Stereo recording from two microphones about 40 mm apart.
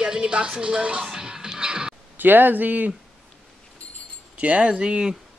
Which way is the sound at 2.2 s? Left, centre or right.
Right.